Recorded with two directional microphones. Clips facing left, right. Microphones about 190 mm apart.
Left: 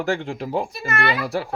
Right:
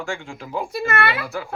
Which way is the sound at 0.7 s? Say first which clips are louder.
Right 5 dB; 60° right (ahead or behind).